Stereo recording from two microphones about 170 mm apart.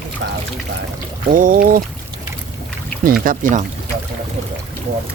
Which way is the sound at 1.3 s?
55° right (ahead or behind).